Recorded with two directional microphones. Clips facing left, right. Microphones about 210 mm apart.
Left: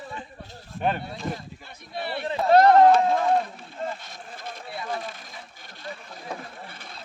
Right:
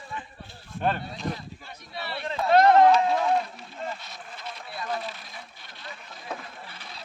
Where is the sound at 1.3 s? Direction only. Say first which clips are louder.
Left 1 dB; 50° left (ahead or behind).